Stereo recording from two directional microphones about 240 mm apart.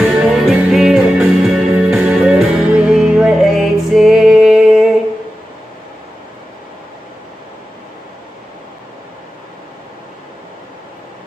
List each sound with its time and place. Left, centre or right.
0.2 s music: centre